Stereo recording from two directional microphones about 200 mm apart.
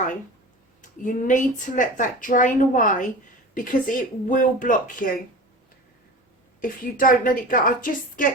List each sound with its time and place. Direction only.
0.8 s a woman's voice: 40° left (ahead or behind)
6.6 s a woman's voice: 45° left (ahead or behind)